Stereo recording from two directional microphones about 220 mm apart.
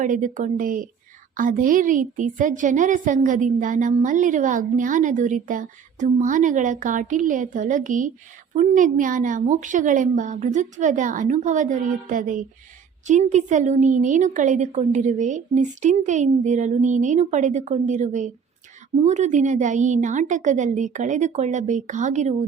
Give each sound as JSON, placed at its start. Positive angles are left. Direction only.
{"t": 0.0, "sound": "a woman's voice", "side_deg": -35}